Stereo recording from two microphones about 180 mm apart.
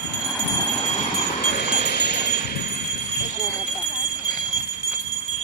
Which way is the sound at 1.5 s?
65° left (ahead or behind).